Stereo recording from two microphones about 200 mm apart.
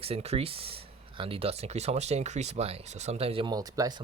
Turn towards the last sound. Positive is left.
turn(degrees=-20)  # may be behind; listen again after turning